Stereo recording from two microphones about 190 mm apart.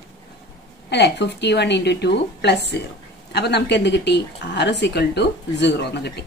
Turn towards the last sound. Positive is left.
turn(degrees=60)  # may be behind; listen again after turning